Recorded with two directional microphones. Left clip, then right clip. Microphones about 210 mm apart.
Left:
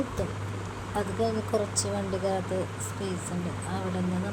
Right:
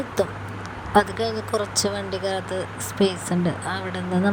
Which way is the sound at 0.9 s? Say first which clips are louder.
Right 9 dB; 35° right (ahead or behind).